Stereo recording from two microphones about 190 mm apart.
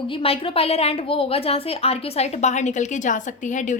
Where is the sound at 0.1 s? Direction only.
30° left (ahead or behind).